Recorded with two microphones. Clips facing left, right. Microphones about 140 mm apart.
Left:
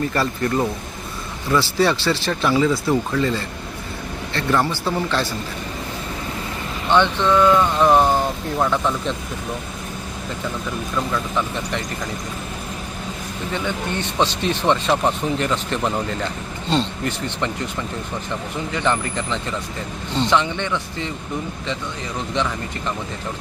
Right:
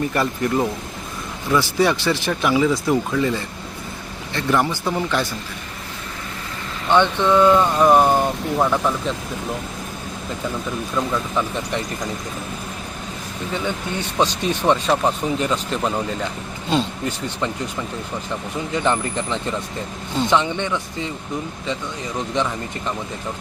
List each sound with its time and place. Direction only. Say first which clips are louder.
0.1 s speech: right 1 dB; 10° right (ahead or behind)
6.9 s speech: right 1 dB; 15° right (ahead or behind)
10.9 s speech: right 1 dB; 10° right (ahead or behind)
13.5 s speech: even; 10° right (ahead or behind)
18.7 s speech: right 1 dB; 15° right (ahead or behind)